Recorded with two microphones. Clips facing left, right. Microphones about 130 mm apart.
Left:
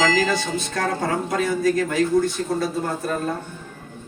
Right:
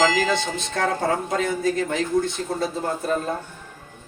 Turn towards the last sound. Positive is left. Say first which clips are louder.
# left 1 dB
turn(degrees=-25)  # may be behind; listen again after turning